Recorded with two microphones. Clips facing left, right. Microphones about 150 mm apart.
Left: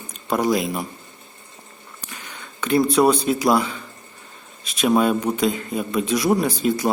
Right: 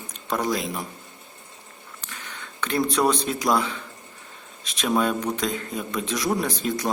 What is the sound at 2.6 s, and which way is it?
Speech, 10° left (ahead or behind).